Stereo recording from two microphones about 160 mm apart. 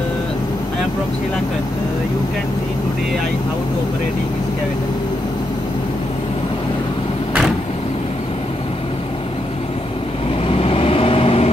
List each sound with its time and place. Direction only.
10.5 s vehicle: 35° left (ahead or behind)